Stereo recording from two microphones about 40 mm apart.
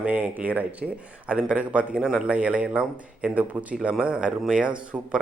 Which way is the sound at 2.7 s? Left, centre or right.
Right.